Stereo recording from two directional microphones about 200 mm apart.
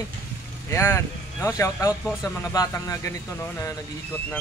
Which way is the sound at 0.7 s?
15° left (ahead or behind).